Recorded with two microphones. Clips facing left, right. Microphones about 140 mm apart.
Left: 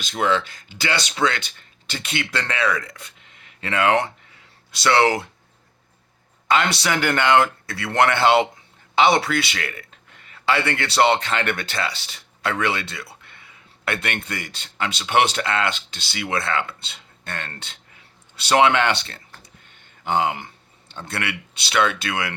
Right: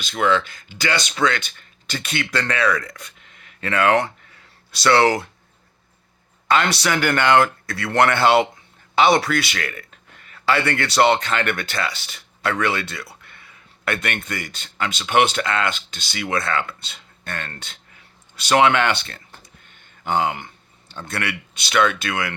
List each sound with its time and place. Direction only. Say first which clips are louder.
0.0 s speech: right 2 dB; 35° left (ahead or behind)
6.5 s speech: right 1 dB; 20° left (ahead or behind)